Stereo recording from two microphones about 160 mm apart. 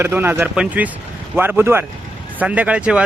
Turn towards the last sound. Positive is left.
turn(degrees=-5)  # may be behind; listen again after turning